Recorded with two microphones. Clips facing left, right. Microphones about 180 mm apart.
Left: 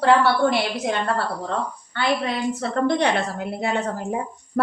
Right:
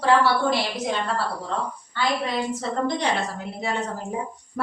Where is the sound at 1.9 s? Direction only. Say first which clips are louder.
Left 2 dB; 65° left (ahead or behind).